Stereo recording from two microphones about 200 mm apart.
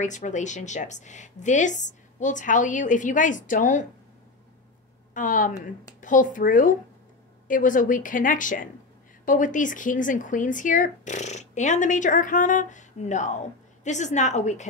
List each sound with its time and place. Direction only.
0.0 s speech: 40° left (ahead or behind)
5.1 s a woman's voice: 40° left (ahead or behind)